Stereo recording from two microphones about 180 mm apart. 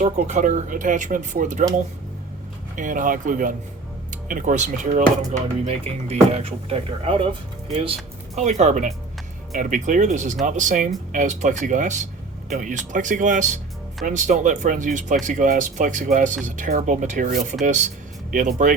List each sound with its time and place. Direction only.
0.0 s speech: 45° right (ahead or behind)
2.7 s speech: 45° right (ahead or behind)